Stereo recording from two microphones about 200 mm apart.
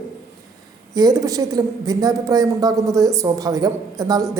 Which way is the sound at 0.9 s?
20° right (ahead or behind).